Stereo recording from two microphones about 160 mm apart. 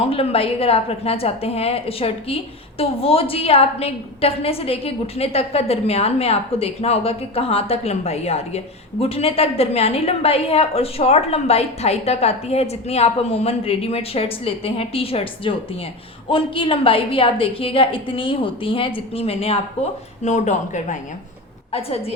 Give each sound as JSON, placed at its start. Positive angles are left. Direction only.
{"t": 0.0, "sound": "a woman's voice", "side_deg": 35}
{"t": 21.7, "sound": "a woman's voice", "side_deg": 40}